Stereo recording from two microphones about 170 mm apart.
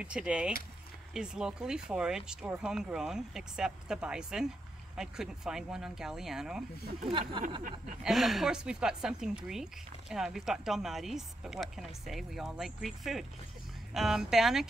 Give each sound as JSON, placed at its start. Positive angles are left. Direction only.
{"t": 0.0, "sound": "a woman's voice", "side_deg": -5}
{"t": 7.1, "sound": "speech", "side_deg": -30}
{"t": 8.0, "sound": "a woman's voice", "side_deg": 0}